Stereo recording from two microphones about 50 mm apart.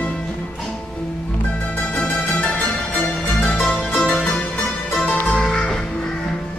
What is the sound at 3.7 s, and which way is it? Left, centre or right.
Music, left.